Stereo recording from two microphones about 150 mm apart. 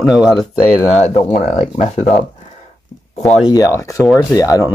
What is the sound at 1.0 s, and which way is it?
Speech, 50° left (ahead or behind).